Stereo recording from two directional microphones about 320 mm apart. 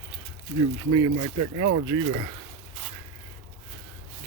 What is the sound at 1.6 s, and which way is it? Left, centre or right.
Speech, right.